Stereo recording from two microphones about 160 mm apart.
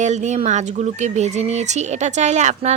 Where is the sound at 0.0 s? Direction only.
45° right (ahead or behind).